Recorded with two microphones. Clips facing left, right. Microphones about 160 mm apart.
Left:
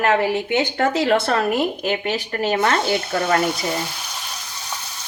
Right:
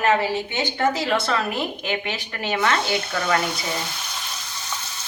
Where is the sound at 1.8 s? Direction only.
40° left (ahead or behind).